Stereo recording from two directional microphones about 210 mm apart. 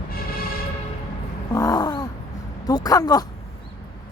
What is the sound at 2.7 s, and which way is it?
Speech, 15° left (ahead or behind).